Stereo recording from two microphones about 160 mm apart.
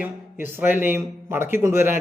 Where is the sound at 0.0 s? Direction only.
10° right (ahead or behind).